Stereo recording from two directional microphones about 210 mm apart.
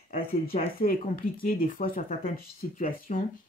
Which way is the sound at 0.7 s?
45° left (ahead or behind).